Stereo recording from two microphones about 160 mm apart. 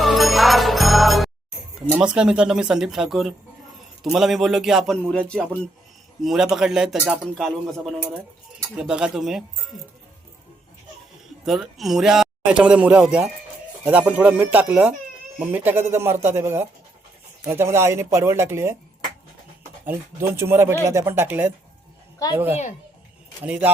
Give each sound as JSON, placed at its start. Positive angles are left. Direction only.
{"t": 0.0, "sound": "music", "side_deg": 0}
{"t": 1.9, "sound": "a man's voice", "side_deg": -5}
{"t": 8.8, "sound": "a man's voice", "side_deg": -5}
{"t": 11.4, "sound": "a man's voice", "side_deg": 0}
{"t": 19.8, "sound": "speech", "side_deg": -15}
{"t": 23.4, "sound": "speech", "side_deg": -10}